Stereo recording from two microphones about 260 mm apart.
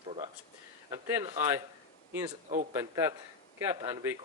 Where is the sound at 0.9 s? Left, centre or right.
Centre.